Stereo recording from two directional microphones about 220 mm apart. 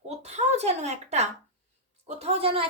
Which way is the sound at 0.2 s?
30° right (ahead or behind).